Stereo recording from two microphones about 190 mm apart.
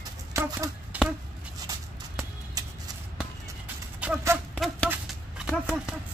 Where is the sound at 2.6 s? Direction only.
20° right (ahead or behind).